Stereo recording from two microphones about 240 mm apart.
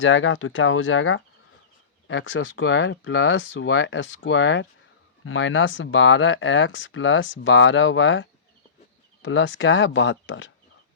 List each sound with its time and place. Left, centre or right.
0.0 s speech: left